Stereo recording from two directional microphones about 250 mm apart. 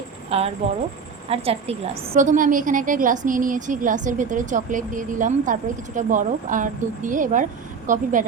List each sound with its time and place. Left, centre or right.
0.3 s a woman's voice: right